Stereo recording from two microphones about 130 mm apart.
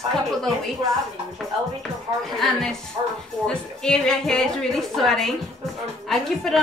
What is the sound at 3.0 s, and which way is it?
Speech, 30° right (ahead or behind).